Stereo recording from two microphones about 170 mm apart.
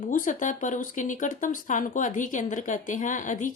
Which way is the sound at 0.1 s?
50° left (ahead or behind).